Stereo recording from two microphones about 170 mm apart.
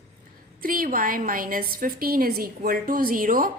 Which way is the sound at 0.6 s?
55° right (ahead or behind).